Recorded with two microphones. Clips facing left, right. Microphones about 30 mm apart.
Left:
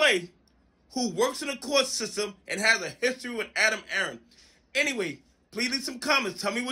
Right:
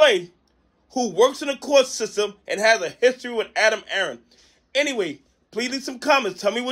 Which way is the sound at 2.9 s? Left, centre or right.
Right.